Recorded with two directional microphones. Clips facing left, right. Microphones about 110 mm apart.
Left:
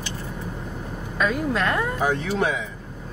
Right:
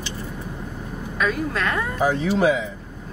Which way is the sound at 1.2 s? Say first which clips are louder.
Left 1 dB; 15° left (ahead or behind).